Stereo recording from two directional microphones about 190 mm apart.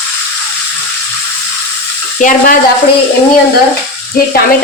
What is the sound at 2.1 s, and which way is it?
Speech, 45° left (ahead or behind).